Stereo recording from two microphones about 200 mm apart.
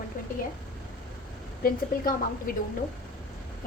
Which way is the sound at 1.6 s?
45° left (ahead or behind).